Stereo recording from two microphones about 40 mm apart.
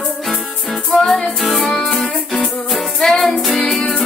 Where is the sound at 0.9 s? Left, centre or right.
Centre.